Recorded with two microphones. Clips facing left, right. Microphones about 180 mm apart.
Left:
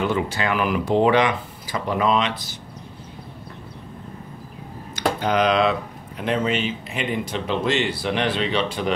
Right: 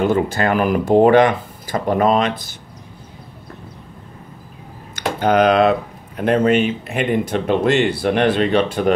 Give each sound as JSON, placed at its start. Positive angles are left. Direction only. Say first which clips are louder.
{"t": 0.0, "sound": "speech", "louder": "right 6 dB", "side_deg": -45}
{"t": 4.9, "sound": "speech", "louder": "right 5 dB", "side_deg": -55}